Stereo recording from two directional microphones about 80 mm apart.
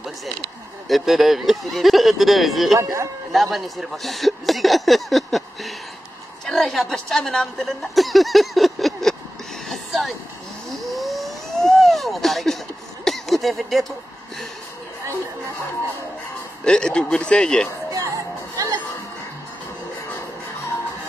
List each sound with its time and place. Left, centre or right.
0.8 s a woman's voice: centre
2.8 s speech: right
3.3 s a woman's voice: centre
10.8 s vehicle: centre
13.0 s a sound: centre
16.6 s speech: centre
17.9 s music: right